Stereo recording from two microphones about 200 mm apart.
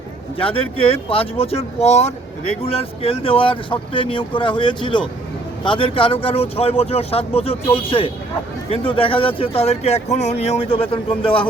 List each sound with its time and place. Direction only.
0.3 s speech: 25° left (ahead or behind)